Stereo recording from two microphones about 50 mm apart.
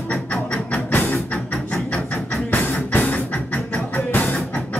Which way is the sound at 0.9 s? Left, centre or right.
Left.